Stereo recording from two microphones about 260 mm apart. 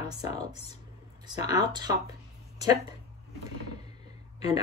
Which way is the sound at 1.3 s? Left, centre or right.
Centre.